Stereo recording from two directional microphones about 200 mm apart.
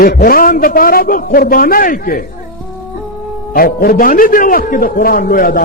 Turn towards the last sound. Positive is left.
turn(degrees=45)  # may be behind; listen again after turning